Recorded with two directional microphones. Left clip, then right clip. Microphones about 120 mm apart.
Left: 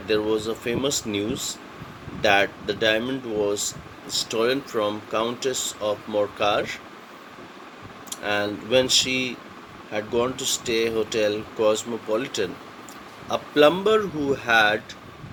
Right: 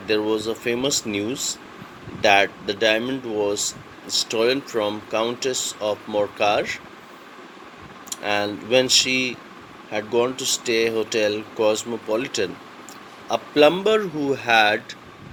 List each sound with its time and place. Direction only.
0.2 s speech: 30° right (ahead or behind)
8.2 s speech: 30° right (ahead or behind)